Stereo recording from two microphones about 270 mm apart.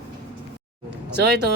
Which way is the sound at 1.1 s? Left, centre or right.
Right.